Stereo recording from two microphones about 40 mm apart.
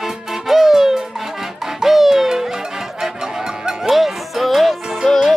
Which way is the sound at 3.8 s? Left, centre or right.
Centre.